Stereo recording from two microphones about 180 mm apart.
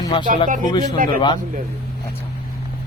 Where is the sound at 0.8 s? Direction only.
50° right (ahead or behind).